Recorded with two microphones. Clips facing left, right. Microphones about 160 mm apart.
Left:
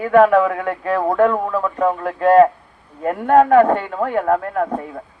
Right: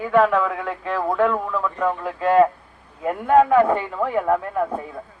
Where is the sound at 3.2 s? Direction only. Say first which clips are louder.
Left 3 dB; 50° left (ahead or behind).